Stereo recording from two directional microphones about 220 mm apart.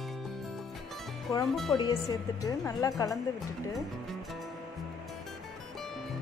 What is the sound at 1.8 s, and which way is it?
A woman's voice, 15° left (ahead or behind).